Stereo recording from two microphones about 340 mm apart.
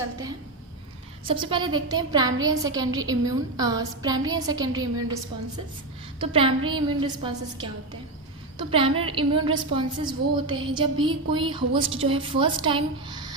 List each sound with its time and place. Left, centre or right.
1.2 s a woman's voice: centre
6.1 s a woman's voice: centre